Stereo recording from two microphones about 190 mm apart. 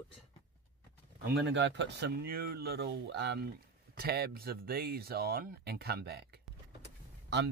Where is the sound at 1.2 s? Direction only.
60° right (ahead or behind).